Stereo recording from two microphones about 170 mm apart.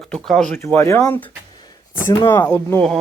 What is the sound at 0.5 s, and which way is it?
Speech, 15° left (ahead or behind).